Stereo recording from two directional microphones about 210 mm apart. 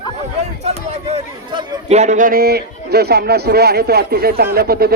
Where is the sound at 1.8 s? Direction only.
30° right (ahead or behind).